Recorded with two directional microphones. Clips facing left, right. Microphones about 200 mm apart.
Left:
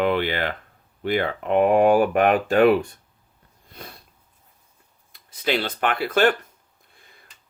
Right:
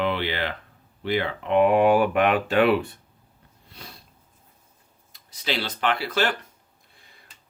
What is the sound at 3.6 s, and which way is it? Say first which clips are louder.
Sniff: left 4 dB; 50° left (ahead or behind).